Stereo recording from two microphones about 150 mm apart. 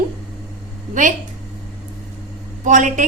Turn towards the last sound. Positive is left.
turn(degrees=-55)  # may be behind; listen again after turning